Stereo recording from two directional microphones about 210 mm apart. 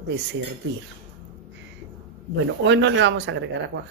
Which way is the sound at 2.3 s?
60° right (ahead or behind).